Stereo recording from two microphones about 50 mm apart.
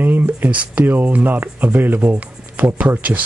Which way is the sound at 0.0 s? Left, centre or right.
Right.